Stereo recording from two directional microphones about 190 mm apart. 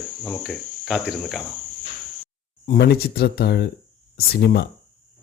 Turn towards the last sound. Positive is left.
turn(degrees=60)  # may be behind; listen again after turning